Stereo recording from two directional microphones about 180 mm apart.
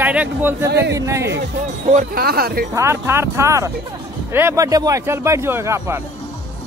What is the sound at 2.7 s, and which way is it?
Speech, 15° right (ahead or behind).